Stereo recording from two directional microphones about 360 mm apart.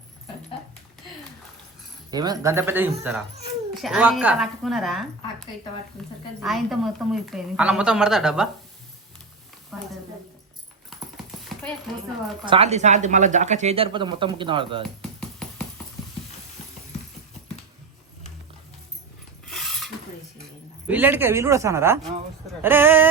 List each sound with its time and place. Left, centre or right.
2.0 s a woman's voice: centre
12.5 s a woman's voice: centre
19.5 s a sound: centre
20.8 s a woman's voice: centre